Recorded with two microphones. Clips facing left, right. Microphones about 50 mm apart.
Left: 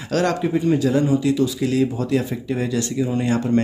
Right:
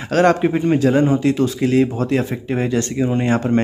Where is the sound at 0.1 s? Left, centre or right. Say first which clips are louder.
Right 5 dB; right.